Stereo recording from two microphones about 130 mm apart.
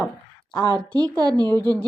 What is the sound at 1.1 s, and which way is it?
Speech, 30° right (ahead or behind).